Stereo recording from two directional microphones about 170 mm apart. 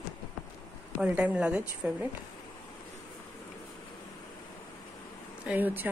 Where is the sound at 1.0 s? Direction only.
5° right (ahead or behind).